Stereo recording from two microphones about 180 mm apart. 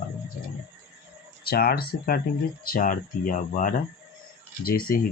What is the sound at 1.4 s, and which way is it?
Speech, 60° left (ahead or behind).